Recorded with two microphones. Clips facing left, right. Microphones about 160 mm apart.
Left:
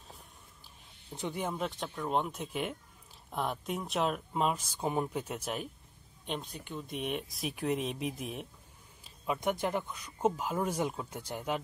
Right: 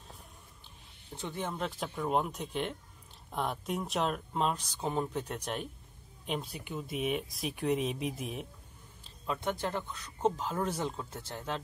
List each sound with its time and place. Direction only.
1.1 s speech: 15° left (ahead or behind)
1.6 s speech: centre (ahead or behind)
9.2 s speech: 15° left (ahead or behind)